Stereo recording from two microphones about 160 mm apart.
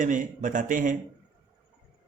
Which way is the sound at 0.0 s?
55° right (ahead or behind).